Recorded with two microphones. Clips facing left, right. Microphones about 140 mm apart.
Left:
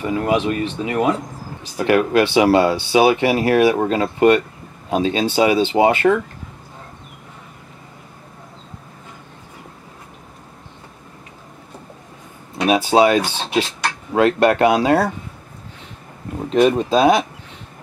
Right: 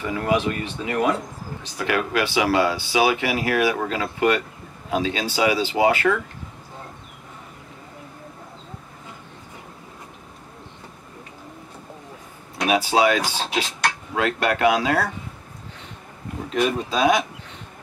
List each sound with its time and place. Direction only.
0.0 s speech: 25° left (ahead or behind)
12.6 s speech: 25° left (ahead or behind)
13.2 s speech: 5° right (ahead or behind)
14.1 s speech: 35° left (ahead or behind)
16.4 s speech: 25° left (ahead or behind)